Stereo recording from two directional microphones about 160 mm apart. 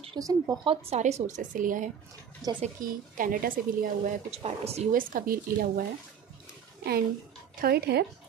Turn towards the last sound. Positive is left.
turn(degrees=-80)